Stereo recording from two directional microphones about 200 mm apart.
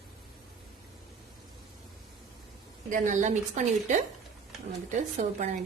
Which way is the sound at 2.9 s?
40° right (ahead or behind).